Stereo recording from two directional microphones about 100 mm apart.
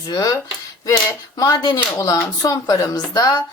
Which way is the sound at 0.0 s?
40° left (ahead or behind).